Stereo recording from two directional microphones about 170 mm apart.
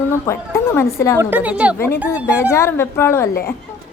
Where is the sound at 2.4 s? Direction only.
15° left (ahead or behind).